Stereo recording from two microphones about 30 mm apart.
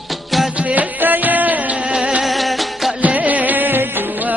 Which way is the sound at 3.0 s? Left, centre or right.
Right.